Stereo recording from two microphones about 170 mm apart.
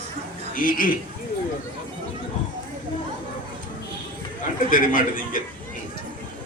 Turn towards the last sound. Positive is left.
turn(degrees=55)  # may be behind; listen again after turning